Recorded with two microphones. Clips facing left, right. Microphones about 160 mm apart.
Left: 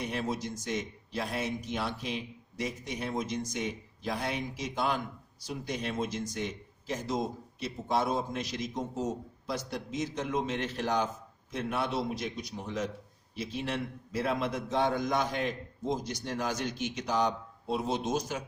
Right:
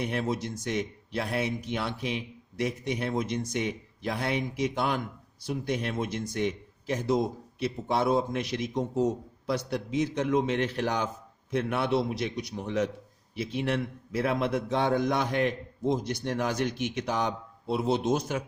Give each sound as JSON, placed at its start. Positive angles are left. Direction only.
{"t": 0.0, "sound": "a man's voice", "side_deg": -60}